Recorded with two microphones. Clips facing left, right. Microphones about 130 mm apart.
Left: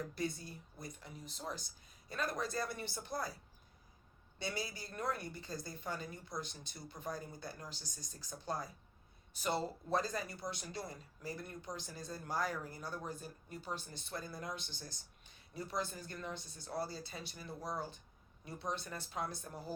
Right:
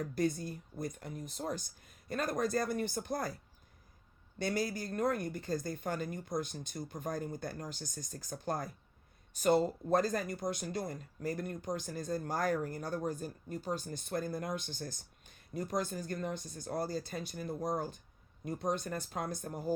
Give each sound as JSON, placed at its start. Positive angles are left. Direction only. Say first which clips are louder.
{"t": 0.0, "sound": "speech", "louder": "right 7 dB", "side_deg": -50}
{"t": 4.4, "sound": "speech", "louder": "right 8 dB", "side_deg": -50}